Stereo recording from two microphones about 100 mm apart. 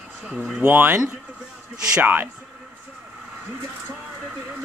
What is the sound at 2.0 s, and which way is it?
Insect, 20° right (ahead or behind).